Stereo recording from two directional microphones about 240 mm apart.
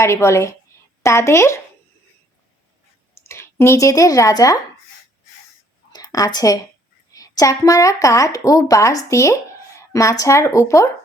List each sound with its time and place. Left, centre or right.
0.0 s a woman's voice: centre
3.2 s speech: centre
5.9 s a woman's voice: centre